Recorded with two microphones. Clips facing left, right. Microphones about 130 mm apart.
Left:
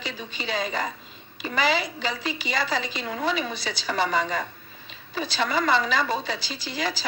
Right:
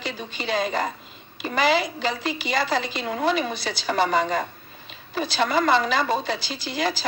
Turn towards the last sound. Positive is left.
turn(degrees=-60)  # may be behind; listen again after turning